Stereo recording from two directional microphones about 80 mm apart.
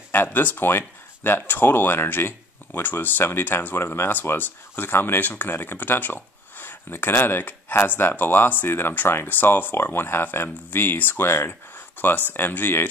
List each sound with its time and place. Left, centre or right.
0.1 s speech: left